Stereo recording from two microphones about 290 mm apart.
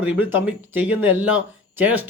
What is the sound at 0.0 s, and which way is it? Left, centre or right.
Speech, centre.